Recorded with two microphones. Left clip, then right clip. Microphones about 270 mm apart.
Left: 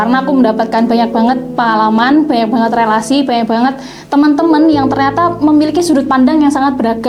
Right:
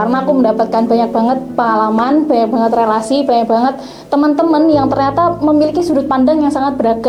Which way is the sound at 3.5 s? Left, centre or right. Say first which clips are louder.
Even; left.